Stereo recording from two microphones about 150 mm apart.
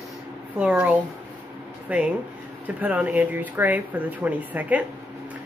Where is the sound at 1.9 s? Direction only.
10° right (ahead or behind).